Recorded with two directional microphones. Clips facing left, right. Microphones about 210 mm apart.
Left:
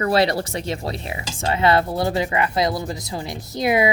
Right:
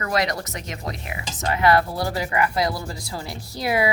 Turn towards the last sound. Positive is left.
turn(degrees=20)  # may be behind; listen again after turning